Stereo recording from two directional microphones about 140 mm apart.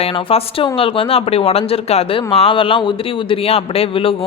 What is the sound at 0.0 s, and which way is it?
Speech, 40° left (ahead or behind).